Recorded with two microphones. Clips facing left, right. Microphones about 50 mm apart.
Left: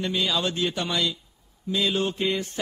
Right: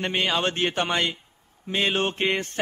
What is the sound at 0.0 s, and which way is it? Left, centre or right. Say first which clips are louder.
Mantra: right 2 dB; right.